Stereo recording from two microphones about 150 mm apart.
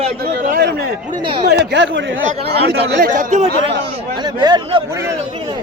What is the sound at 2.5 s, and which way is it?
Speech, 90° right.